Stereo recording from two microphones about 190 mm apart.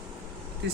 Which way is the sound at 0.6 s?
65° right (ahead or behind).